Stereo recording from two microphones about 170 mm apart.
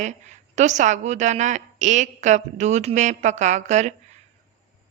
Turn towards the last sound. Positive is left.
turn(degrees=-45)  # may be behind; listen again after turning